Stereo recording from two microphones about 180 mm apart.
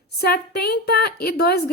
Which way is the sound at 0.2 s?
60° left (ahead or behind).